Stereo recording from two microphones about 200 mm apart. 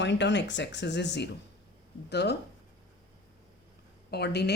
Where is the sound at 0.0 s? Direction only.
60° left (ahead or behind).